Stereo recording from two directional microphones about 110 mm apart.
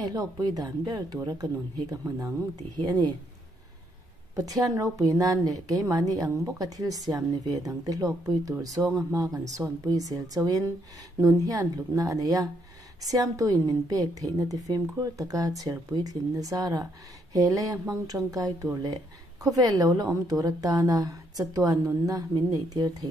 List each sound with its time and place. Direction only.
0.0 s a woman's voice: 35° right (ahead or behind)
4.4 s a woman's voice: 30° right (ahead or behind)